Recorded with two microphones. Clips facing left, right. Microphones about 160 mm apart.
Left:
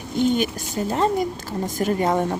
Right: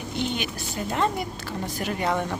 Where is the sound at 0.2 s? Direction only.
45° left (ahead or behind).